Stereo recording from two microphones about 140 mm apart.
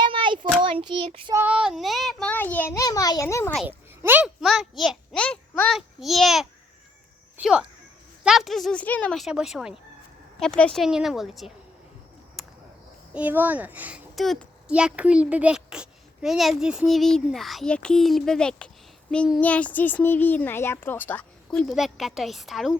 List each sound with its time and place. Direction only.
0.0 s child singing: 35° right (ahead or behind)
0.6 s a child's voice: 40° right (ahead or behind)
1.5 s a child's voice: 5° right (ahead or behind)
2.3 s a child's voice: 15° left (ahead or behind)
3.7 s a child's voice: 15° right (ahead or behind)
12.4 s a sound: centre (ahead or behind)
13.1 s a child's voice: 10° right (ahead or behind)
14.2 s a child's voice: centre (ahead or behind)